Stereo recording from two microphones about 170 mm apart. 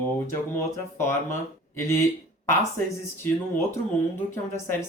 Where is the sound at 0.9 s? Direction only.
15° left (ahead or behind).